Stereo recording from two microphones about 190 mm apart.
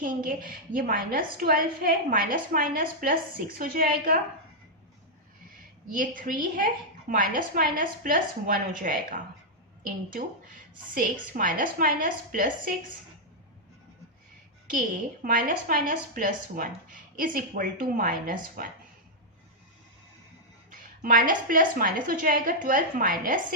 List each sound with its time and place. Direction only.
0.0 s a woman's voice: 45° right (ahead or behind)
5.9 s a woman's voice: 45° right (ahead or behind)
10.9 s a woman's voice: 45° right (ahead or behind)
14.7 s a woman's voice: 45° right (ahead or behind)
20.7 s a woman's voice: 45° right (ahead or behind)